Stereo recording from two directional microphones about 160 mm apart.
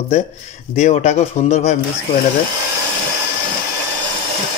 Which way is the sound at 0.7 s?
45° left (ahead or behind).